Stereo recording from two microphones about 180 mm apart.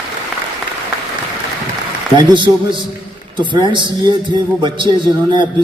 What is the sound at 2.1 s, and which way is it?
A man's voice, 25° right (ahead or behind).